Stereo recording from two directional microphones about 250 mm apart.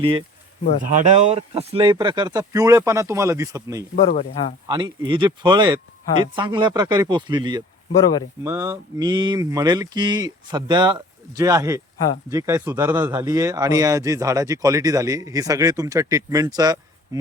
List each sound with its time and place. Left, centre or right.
0.9 s speech: right; by 3.8 s centre
3.9 s speech: left
4.7 s speech: centre
7.9 s speech: centre
8.4 s speech: centre